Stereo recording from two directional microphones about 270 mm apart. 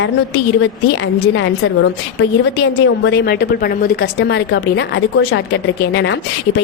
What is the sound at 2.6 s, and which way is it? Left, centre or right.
A woman's voice, left.